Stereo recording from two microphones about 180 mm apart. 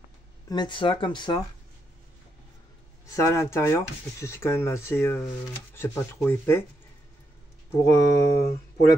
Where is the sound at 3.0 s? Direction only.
15° left (ahead or behind).